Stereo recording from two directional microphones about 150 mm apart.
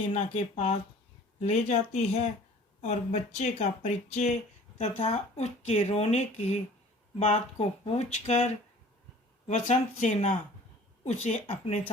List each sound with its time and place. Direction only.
0.1 s speech: 45° left (ahead or behind)
9.5 s speech: 55° left (ahead or behind)